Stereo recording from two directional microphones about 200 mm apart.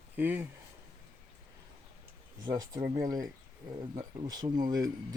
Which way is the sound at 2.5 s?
20° right (ahead or behind).